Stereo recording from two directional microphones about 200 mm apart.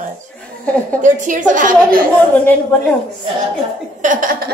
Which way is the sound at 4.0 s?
40° right (ahead or behind).